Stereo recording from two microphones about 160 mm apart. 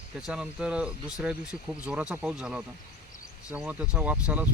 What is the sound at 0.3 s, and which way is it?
Speech, 5° right (ahead or behind).